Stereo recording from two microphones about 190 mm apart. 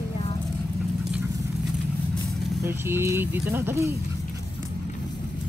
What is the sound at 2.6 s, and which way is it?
Speech, 10° right (ahead or behind).